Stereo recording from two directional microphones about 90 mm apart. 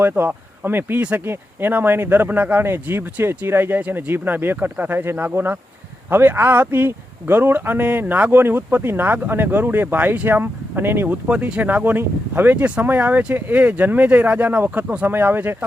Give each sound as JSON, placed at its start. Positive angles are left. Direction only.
{"t": 0.0, "sound": "speech", "side_deg": -20}
{"t": 11.3, "sound": "speech", "side_deg": -15}